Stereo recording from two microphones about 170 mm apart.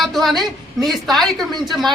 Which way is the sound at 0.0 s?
Centre (ahead or behind).